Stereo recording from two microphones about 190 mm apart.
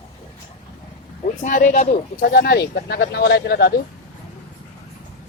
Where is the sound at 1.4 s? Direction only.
45° left (ahead or behind).